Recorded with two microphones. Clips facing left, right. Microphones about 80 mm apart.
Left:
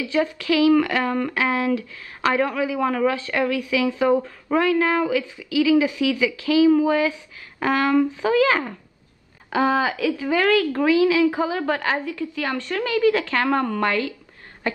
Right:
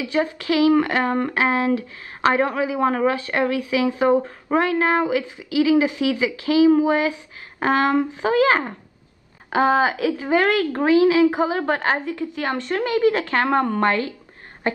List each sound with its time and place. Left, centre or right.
0.0 s a woman's voice: right